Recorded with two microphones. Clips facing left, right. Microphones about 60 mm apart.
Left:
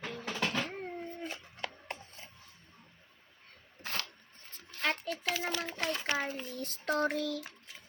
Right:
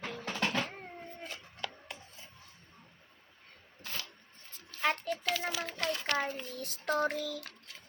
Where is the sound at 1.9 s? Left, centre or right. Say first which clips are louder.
Left 4 dB; left.